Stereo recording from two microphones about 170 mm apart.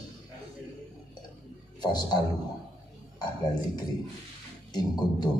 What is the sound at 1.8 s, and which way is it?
Speech, 25° left (ahead or behind).